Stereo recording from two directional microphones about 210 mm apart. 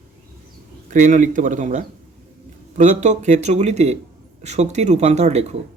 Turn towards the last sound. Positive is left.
turn(degrees=-30)  # may be behind; listen again after turning